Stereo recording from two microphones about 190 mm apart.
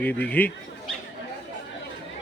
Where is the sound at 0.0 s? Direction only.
10° left (ahead or behind).